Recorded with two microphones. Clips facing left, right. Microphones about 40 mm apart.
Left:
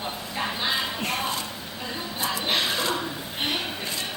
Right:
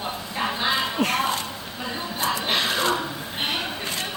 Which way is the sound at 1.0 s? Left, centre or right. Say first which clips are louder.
Right 5 dB; right.